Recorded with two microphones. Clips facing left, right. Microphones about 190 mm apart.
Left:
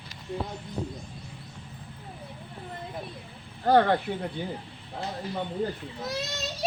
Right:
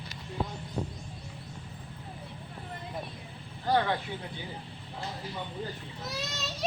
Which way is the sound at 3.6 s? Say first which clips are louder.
Left 7 dB; 55° left (ahead or behind).